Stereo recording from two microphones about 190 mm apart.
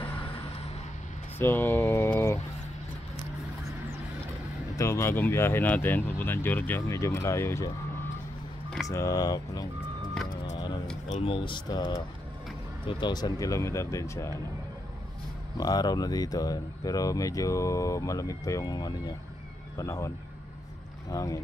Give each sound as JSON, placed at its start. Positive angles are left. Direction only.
{"t": 1.4, "sound": "a sound", "side_deg": 10}
{"t": 4.7, "sound": "speech", "side_deg": 15}
{"t": 8.8, "sound": "speech", "side_deg": 15}
{"t": 11.1, "sound": "speech", "side_deg": 30}
{"t": 15.5, "sound": "speech", "side_deg": 20}
{"t": 21.1, "sound": "speech", "side_deg": 20}